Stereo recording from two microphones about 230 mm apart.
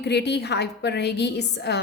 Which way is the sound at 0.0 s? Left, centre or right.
Left.